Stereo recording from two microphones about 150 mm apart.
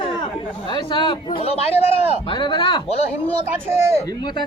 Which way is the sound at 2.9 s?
45° left (ahead or behind).